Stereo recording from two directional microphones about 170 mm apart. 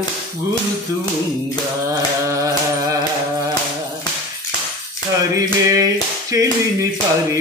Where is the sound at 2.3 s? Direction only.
20° right (ahead or behind).